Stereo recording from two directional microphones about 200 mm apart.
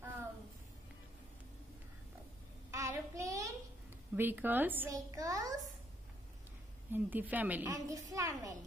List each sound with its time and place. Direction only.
2.7 s child singing: 15° right (ahead or behind)
4.1 s a child's voice: 10° right (ahead or behind)
6.9 s a woman's voice: 10° right (ahead or behind)